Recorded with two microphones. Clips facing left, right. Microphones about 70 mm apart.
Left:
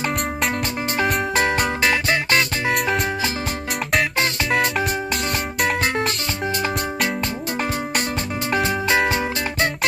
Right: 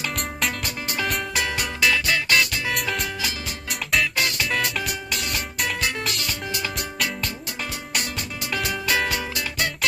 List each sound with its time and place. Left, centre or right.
0.9 s music: left
4.5 s music: left
8.5 s music: left